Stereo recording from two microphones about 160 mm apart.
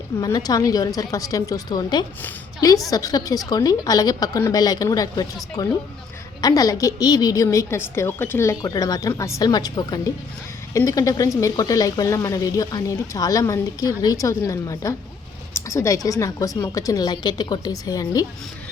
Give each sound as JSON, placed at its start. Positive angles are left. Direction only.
{"t": 0.2, "sound": "a woman's voice", "side_deg": 25}